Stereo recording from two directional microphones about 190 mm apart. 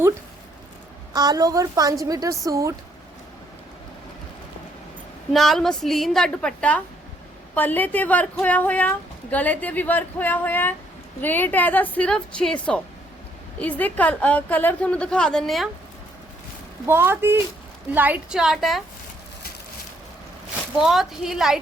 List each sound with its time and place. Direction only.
1.1 s a woman's voice: 20° right (ahead or behind)
5.3 s a woman's voice: centre (ahead or behind)
16.8 s a woman's voice: 10° right (ahead or behind)
20.7 s a woman's voice: centre (ahead or behind)